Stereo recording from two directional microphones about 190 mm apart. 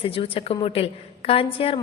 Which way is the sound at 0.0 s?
30° left (ahead or behind).